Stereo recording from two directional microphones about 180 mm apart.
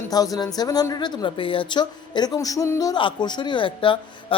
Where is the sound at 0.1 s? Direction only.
20° left (ahead or behind).